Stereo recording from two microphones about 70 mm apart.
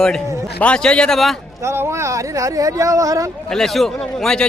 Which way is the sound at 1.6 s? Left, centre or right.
Right.